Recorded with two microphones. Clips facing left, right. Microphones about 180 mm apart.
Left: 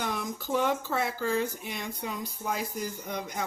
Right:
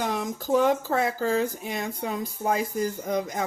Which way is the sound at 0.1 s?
90° right.